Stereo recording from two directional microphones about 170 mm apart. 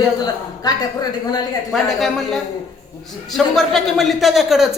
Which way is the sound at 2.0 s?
Centre (ahead or behind).